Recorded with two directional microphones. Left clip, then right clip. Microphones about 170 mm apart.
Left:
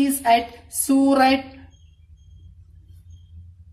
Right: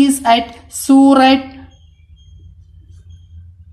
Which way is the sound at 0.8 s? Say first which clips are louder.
Right 8 dB; 20° right (ahead or behind).